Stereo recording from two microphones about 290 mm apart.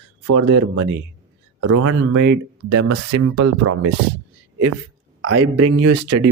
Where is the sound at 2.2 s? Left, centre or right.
Right.